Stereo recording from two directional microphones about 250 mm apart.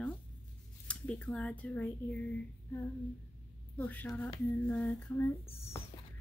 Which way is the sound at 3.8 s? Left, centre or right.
Centre.